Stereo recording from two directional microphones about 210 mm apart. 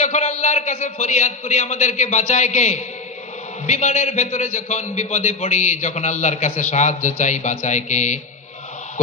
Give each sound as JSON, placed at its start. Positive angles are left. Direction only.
{"t": 0.0, "sound": "a man's voice", "side_deg": 30}